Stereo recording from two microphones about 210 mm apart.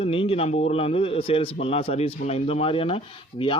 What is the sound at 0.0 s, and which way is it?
Speech, 25° left (ahead or behind).